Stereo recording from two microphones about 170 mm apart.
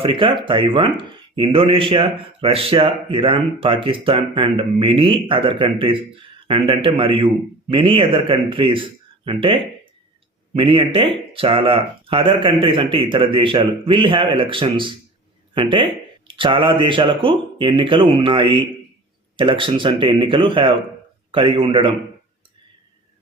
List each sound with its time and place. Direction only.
0.0 s speech: 30° right (ahead or behind)